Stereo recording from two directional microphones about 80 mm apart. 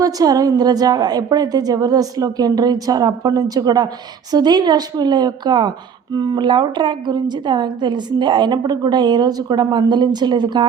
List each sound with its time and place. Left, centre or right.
0.0 s a woman's voice: right
6.1 s a woman's voice: right
6.4 s a woman's voice: right